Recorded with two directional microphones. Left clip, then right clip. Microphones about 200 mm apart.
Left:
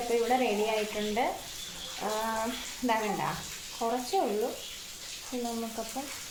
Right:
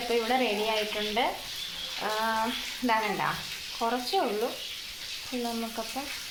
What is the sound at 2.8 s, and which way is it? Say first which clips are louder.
Sizzle: right 2 dB; 5° right (ahead or behind).